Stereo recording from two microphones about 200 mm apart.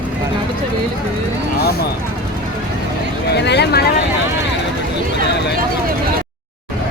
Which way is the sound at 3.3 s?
55° left (ahead or behind).